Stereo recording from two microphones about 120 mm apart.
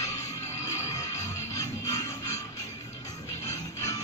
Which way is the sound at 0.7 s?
25° left (ahead or behind).